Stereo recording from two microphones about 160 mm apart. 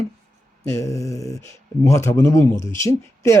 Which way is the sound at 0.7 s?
20° left (ahead or behind).